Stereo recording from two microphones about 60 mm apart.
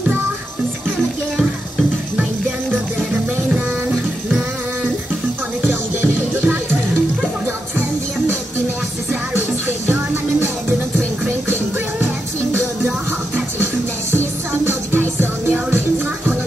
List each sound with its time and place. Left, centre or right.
5.7 s music: right
14.1 s music: right